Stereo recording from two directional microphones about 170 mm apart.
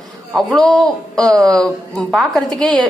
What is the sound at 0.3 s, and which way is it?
A man's voice, centre (ahead or behind).